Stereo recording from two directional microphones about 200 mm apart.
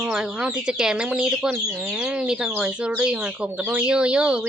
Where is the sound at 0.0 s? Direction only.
5° right (ahead or behind).